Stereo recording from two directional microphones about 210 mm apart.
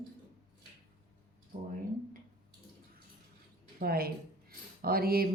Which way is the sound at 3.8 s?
45° right (ahead or behind).